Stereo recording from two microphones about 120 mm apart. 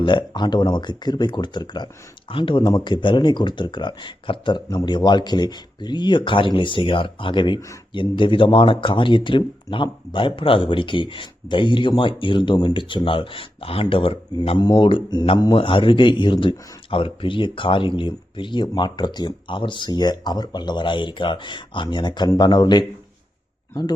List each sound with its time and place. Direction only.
0.0 s speech: 40° left (ahead or behind)
14.6 s speech: 40° left (ahead or behind)